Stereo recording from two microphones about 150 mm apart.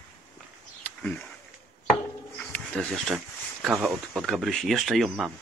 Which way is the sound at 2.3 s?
10° left (ahead or behind).